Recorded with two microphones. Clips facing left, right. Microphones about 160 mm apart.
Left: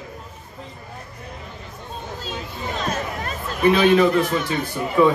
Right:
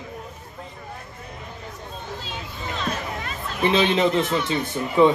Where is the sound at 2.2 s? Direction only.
45° left (ahead or behind).